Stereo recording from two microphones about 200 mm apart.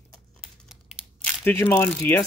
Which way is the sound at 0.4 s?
Centre (ahead or behind).